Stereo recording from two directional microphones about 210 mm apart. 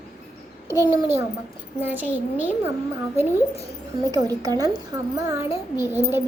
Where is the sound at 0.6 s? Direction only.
10° right (ahead or behind).